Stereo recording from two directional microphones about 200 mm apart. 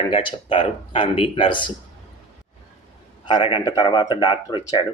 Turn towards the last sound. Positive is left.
turn(degrees=20)  # may be behind; listen again after turning